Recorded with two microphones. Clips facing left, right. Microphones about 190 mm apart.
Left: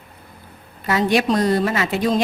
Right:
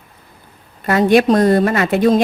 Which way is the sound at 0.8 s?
55° right (ahead or behind).